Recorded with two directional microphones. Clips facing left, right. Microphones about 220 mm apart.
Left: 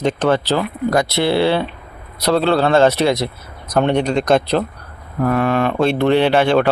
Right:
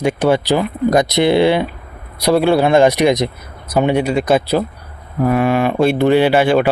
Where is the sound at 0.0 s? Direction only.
10° right (ahead or behind).